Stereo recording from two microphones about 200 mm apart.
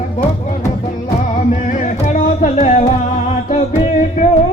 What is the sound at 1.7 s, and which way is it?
Music, 40° left (ahead or behind).